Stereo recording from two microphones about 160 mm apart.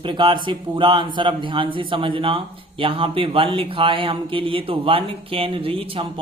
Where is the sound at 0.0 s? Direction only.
30° right (ahead or behind).